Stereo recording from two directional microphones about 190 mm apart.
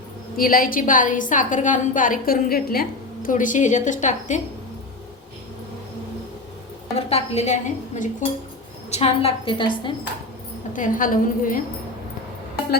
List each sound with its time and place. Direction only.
0.3 s a woman's voice: 50° left (ahead or behind)
6.9 s a woman's voice: 35° left (ahead or behind)
10.8 s a woman's voice: 45° left (ahead or behind)